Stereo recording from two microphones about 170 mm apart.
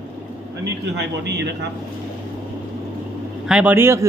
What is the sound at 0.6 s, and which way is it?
Speech, 85° right.